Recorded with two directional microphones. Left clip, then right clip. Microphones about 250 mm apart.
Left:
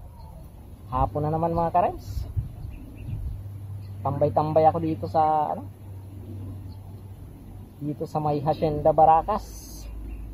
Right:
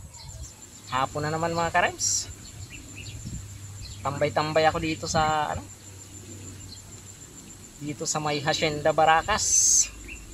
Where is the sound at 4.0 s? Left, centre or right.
Right.